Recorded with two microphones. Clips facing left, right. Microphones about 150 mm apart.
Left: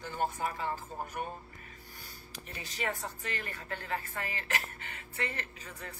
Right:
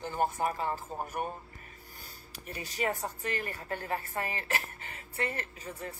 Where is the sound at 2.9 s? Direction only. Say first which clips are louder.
Right 4 dB; 45° right (ahead or behind).